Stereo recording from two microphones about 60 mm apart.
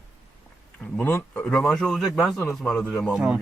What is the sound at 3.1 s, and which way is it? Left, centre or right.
Speech, centre.